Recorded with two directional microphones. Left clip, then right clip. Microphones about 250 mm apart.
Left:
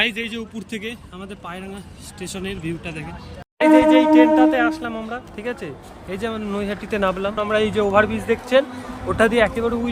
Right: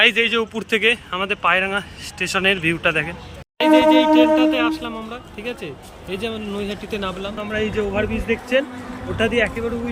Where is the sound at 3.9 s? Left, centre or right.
Centre.